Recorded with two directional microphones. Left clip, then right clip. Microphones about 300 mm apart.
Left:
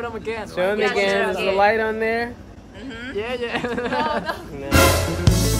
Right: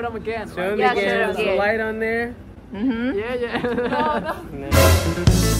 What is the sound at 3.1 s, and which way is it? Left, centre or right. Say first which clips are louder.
A man's voice: right 1 dB; centre.